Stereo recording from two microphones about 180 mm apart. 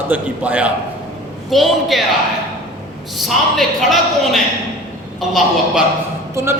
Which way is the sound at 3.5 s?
Centre (ahead or behind).